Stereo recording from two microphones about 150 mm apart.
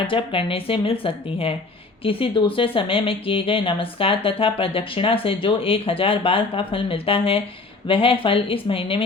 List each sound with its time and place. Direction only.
0.1 s speech: 35° left (ahead or behind)